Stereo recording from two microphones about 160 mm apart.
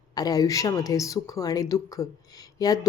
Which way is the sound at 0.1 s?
25° left (ahead or behind).